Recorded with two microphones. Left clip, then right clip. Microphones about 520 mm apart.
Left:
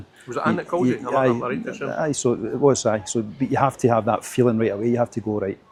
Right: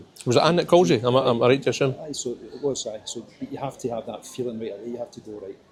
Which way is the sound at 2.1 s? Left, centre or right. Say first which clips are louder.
Left 9 dB; left.